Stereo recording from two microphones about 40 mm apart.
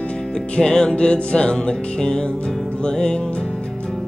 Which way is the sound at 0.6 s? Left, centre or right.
Centre.